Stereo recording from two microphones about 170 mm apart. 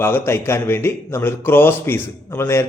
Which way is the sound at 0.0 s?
15° left (ahead or behind).